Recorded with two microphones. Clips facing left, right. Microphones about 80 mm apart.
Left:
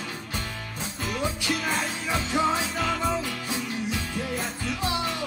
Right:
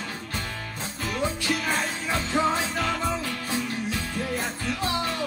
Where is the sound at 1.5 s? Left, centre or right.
Centre.